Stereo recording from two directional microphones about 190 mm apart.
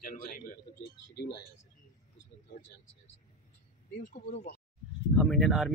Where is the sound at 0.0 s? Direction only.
45° left (ahead or behind).